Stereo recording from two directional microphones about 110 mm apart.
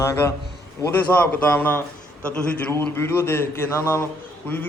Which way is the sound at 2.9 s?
25° left (ahead or behind).